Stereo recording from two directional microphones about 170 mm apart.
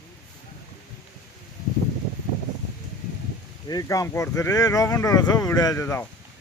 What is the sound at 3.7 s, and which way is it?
Speech, 20° left (ahead or behind).